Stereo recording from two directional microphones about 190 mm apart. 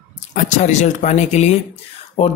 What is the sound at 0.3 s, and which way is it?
Speech, 40° left (ahead or behind).